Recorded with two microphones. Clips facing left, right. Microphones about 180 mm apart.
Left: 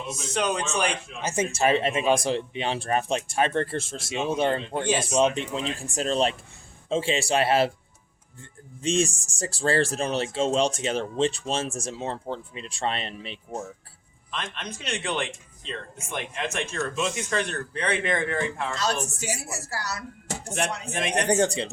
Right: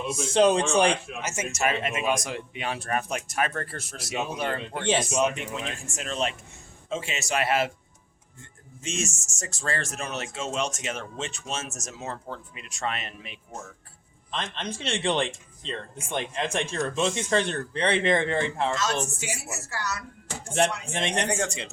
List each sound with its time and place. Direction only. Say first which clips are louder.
0.3 s speech: right 6 dB; 30° right (ahead or behind)
1.2 s speech: left 8 dB; 30° left (ahead or behind)
8.8 s speech: left 8 dB; 30° left (ahead or behind)
14.3 s speech: right 2 dB; 30° right (ahead or behind)
18.8 s speech: even; 35° left (ahead or behind)
20.9 s speech: left 1 dB; 30° right (ahead or behind)
21.2 s speech: left 6 dB; 35° left (ahead or behind)